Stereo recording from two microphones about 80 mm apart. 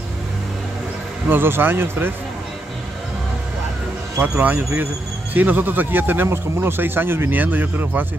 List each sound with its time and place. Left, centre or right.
1.3 s speech: right
4.2 s speech: right